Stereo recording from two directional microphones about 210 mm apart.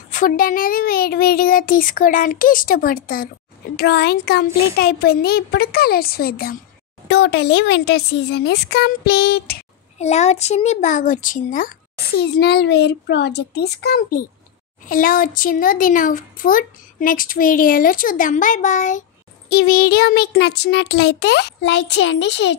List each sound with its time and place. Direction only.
0.1 s speech: 40° left (ahead or behind)
9.9 s a woman's voice: 30° left (ahead or behind)
12.2 s a woman's voice: 50° left (ahead or behind)